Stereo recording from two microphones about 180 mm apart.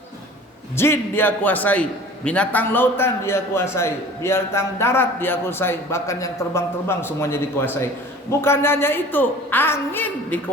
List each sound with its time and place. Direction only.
0.8 s a man's voice: 15° left (ahead or behind)